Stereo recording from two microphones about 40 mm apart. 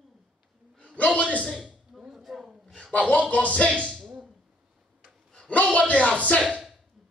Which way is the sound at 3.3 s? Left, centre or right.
Left.